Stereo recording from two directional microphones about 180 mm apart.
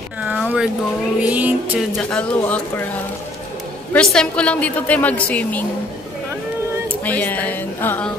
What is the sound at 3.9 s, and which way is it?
A woman's voice, 5° left (ahead or behind).